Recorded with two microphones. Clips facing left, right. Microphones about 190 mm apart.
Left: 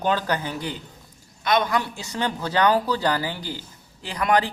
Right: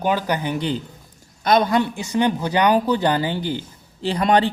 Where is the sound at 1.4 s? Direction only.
35° right (ahead or behind).